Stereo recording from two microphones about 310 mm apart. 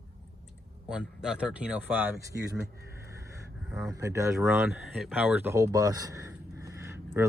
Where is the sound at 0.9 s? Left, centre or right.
Centre.